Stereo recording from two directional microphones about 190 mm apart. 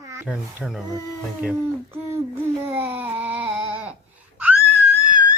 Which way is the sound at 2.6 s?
10° right (ahead or behind).